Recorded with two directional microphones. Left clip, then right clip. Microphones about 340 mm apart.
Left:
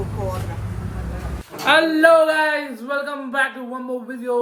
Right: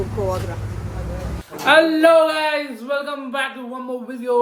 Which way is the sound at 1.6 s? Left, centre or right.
Centre.